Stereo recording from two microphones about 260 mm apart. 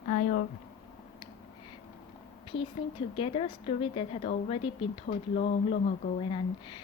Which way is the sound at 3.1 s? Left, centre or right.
Left.